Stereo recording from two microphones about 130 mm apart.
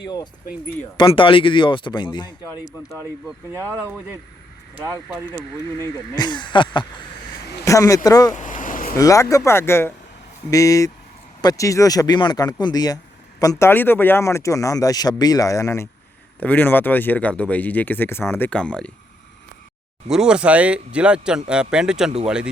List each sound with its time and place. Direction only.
0.9 s a man's voice: 40° left (ahead or behind); by 3.0 s 25° left (ahead or behind)
3.8 s speech: 15° right (ahead or behind)
5.3 s speech: 20° left (ahead or behind)
6.1 s a man's voice: 35° left (ahead or behind)
7.6 s speech: 25° left (ahead or behind)
8.4 s a sound: 90° left
9.0 s speech: 25° left (ahead or behind); by 18.9 s 10° left (ahead or behind)
20.1 s speech: 5° right (ahead or behind)